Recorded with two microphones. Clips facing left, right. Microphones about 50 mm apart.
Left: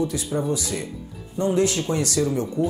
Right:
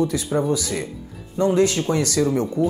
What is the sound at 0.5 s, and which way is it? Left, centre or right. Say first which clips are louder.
Speech: right 3 dB; right.